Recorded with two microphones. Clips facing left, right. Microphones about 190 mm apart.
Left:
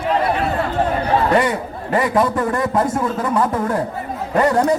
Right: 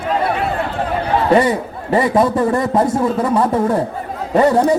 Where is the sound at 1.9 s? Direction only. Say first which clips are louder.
Right 3 dB; 30° right (ahead or behind).